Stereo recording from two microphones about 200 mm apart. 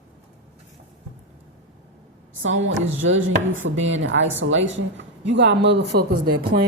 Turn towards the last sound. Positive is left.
turn(degrees=-45)  # may be behind; listen again after turning